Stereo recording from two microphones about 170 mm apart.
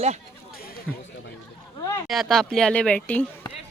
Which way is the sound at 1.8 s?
20° left (ahead or behind).